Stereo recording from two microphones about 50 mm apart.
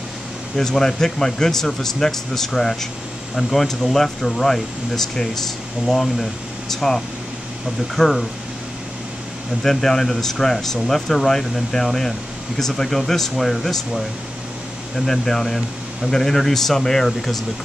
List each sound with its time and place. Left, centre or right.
0.6 s speech: centre
9.6 s speech: centre